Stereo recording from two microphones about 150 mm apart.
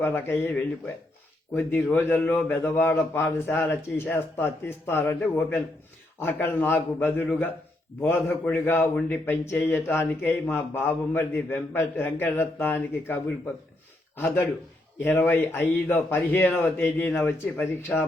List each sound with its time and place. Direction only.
0.0 s a man's voice: 15° left (ahead or behind)
1.5 s a man's voice: 10° left (ahead or behind)
14.2 s a man's voice: 15° left (ahead or behind)